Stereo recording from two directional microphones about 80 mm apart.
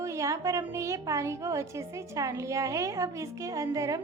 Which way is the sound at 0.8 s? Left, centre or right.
Right.